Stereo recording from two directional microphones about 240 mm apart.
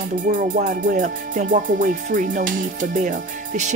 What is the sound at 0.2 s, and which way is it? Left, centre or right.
Speech, right.